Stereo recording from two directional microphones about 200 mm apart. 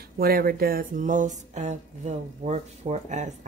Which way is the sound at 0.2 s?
50° right (ahead or behind).